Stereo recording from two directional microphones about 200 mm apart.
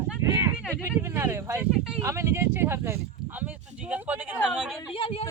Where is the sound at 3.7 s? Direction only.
5° right (ahead or behind).